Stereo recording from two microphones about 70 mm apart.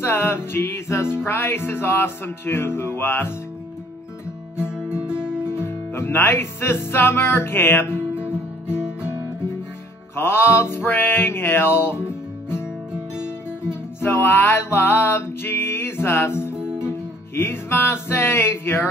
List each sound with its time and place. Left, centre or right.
0.0 s music: left
4.6 s music: centre
5.7 s music: left
10.1 s music: left
14.0 s music: left